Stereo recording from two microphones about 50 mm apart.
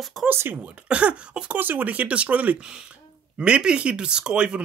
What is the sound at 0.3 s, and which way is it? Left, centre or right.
Speech, right.